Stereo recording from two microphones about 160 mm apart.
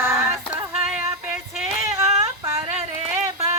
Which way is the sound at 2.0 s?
20° right (ahead or behind).